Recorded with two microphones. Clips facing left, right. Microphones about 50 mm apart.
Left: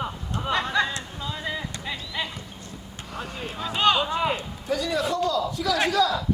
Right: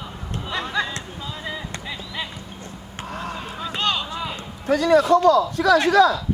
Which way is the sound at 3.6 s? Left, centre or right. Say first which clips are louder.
Left 3 dB; centre.